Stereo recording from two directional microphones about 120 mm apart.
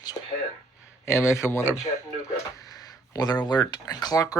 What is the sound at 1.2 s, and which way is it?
Speech, 25° left (ahead or behind).